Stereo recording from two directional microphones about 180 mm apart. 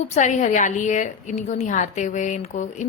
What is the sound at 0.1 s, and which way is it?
A woman's voice, 45° left (ahead or behind).